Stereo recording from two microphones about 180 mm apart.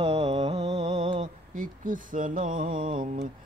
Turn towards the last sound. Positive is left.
turn(degrees=-50)  # may be behind; listen again after turning